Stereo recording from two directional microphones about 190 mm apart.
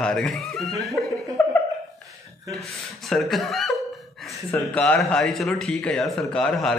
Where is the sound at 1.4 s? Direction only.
10° left (ahead or behind).